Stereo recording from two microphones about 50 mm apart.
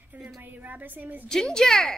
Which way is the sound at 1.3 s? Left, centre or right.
Centre.